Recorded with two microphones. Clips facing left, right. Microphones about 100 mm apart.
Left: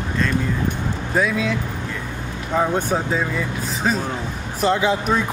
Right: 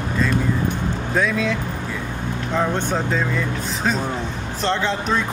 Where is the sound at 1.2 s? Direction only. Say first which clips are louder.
Even; 5° left (ahead or behind).